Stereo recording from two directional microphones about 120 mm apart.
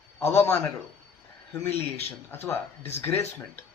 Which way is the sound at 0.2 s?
20° left (ahead or behind).